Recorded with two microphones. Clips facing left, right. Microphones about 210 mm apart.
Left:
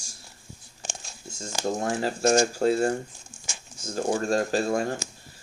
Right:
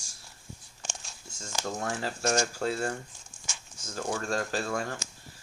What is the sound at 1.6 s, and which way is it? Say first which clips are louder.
Speech: left 7 dB; 30° left (ahead or behind).